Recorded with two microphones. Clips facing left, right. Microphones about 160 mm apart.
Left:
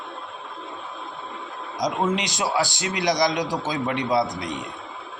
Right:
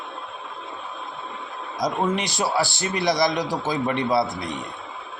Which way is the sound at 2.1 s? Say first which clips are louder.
Right 1 dB; 20° left (ahead or behind).